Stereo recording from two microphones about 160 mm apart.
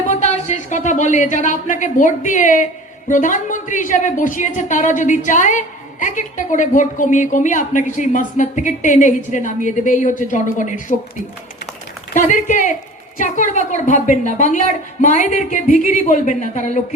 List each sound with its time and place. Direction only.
0.1 s a woman's voice: 45° left (ahead or behind)
12.1 s a woman's voice: 55° left (ahead or behind)